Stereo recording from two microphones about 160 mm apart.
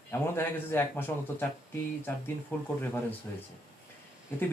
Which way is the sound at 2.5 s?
15° left (ahead or behind).